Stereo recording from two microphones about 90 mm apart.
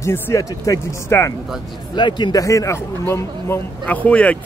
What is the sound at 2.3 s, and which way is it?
Speech, 40° left (ahead or behind).